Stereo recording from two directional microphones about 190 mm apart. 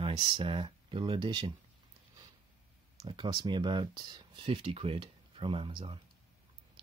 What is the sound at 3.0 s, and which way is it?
Speech, 25° right (ahead or behind).